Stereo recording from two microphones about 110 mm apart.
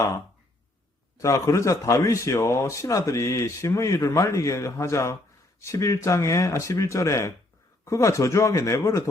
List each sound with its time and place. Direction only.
1.2 s speech: 30° left (ahead or behind)